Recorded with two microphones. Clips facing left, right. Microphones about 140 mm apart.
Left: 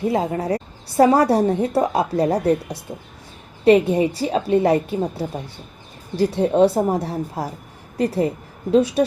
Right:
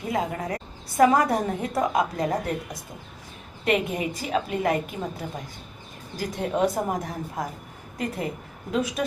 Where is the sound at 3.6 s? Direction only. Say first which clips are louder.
Left 10 dB; 30° left (ahead or behind).